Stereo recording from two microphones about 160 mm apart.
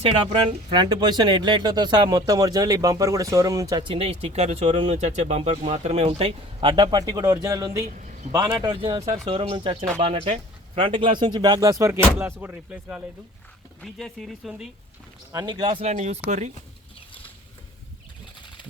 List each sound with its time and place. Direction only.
0.1 s speech: 30° right (ahead or behind)
9.0 s speech: 40° right (ahead or behind); by 13.0 s 10° right (ahead or behind)
13.8 s speech: centre (ahead or behind)
15.3 s speech: 25° right (ahead or behind)
15.8 s speech: 45° right (ahead or behind)